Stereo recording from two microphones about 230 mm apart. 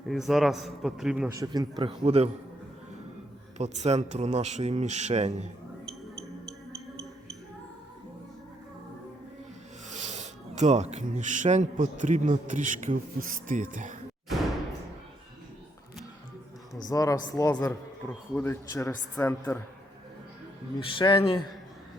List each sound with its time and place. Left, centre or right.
0.1 s a man's voice: centre
1.3 s a man's voice: centre
3.6 s a man's voice: right
9.9 s speech: right
16.9 s a man's voice: centre
20.7 s speech: left